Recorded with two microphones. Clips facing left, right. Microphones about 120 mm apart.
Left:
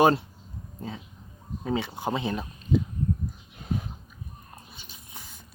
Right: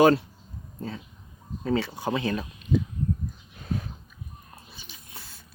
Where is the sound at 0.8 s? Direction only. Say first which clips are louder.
Right 2 dB; 15° left (ahead or behind).